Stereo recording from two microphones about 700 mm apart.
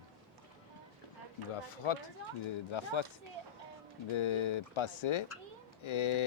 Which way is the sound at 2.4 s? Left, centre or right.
Left.